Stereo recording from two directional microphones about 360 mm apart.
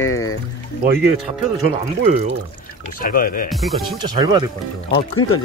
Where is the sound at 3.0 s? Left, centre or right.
Left.